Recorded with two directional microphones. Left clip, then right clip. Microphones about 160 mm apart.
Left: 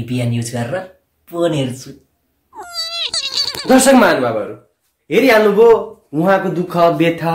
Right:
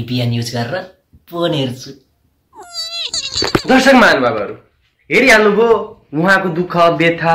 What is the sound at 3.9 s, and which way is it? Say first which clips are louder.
Speech: right 4 dB; 15° left (ahead or behind).